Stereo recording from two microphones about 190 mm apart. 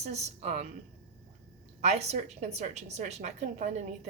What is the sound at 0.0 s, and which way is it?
Speech, 35° right (ahead or behind).